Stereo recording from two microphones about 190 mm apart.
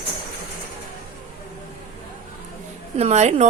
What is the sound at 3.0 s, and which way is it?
Speech, 35° right (ahead or behind).